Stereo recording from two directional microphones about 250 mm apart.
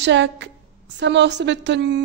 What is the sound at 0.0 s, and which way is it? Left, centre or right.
A woman's voice, right.